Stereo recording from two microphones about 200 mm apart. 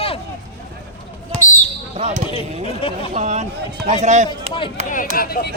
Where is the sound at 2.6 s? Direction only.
25° left (ahead or behind).